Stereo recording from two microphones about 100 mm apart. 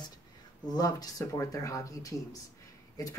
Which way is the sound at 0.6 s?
40° left (ahead or behind).